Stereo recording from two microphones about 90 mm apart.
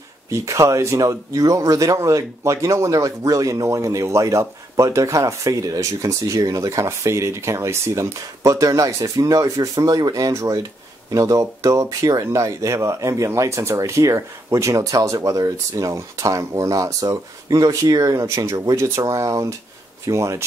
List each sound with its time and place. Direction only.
0.3 s speech: 35° right (ahead or behind)